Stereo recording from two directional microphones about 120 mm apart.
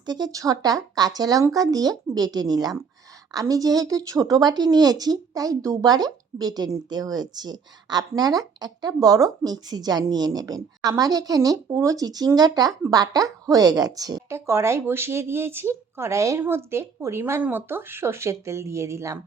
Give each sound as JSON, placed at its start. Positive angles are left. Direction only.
{"t": 0.0, "sound": "a woman's voice", "side_deg": -35}